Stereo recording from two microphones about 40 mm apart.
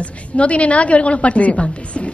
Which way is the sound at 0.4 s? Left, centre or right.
Left.